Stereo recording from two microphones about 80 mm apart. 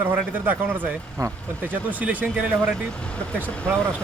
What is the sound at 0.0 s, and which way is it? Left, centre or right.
Speech, right.